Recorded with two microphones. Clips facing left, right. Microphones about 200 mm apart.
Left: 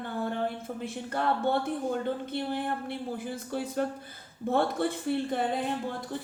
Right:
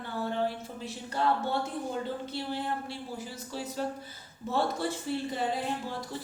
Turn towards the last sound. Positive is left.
turn(degrees=55)  # may be behind; listen again after turning